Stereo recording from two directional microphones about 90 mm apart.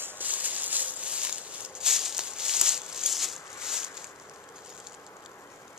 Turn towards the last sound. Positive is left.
turn(degrees=-5)  # may be behind; listen again after turning